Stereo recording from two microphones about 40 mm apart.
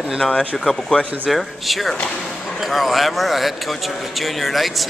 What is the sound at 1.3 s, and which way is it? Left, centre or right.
Speech, centre.